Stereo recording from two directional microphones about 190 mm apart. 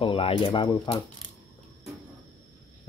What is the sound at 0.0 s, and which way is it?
Speech, 30° left (ahead or behind).